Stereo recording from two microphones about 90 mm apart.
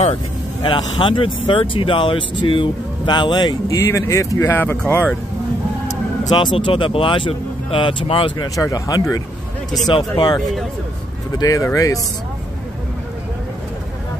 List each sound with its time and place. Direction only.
0.7 s speech: 70° left (ahead or behind)
3.6 s speech: 35° left (ahead or behind)
4.5 s speech: 25° left (ahead or behind)
6.3 s speech: 65° left (ahead or behind)
8.5 s speech: 40° left (ahead or behind)
9.8 s speech: 60° left (ahead or behind)
11.3 s speech: 40° left (ahead or behind)